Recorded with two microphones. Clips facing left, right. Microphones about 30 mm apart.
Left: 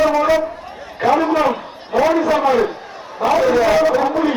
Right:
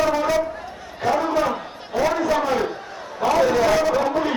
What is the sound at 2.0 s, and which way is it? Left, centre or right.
Speech, centre.